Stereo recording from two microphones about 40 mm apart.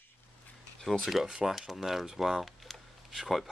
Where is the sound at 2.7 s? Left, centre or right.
Centre.